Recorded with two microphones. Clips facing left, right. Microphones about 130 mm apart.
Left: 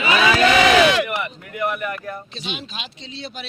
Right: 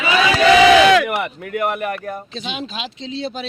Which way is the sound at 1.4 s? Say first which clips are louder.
Right 3 dB; 55° right (ahead or behind).